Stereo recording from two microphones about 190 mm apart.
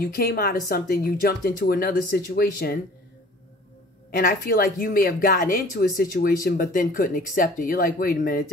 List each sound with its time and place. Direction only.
0.0 s speech: 55° left (ahead or behind)
4.2 s speech: 50° left (ahead or behind)